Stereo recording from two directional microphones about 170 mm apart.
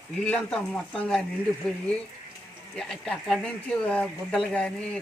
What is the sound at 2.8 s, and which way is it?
Speech, 5° left (ahead or behind).